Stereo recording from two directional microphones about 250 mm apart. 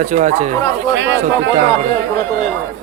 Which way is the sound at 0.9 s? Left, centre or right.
Right.